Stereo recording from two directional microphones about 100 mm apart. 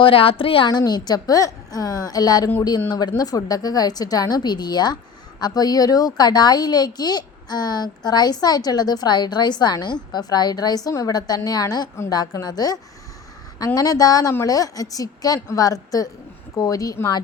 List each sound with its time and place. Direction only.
0.0 s a woman's voice: 65° left (ahead or behind)
0.7 s a woman's voice: 45° left (ahead or behind)